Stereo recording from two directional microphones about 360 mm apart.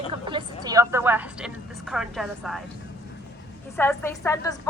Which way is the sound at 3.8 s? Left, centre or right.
Centre.